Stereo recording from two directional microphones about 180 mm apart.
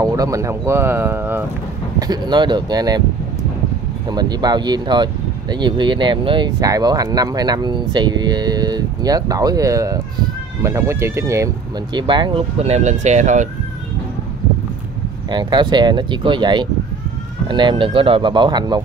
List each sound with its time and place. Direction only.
0.0 s speech: 20° right (ahead or behind)
2.0 s speech: 25° right (ahead or behind)
4.1 s speech: 20° right (ahead or behind); by 13.5 s 40° right (ahead or behind)
15.2 s speech: 25° right (ahead or behind)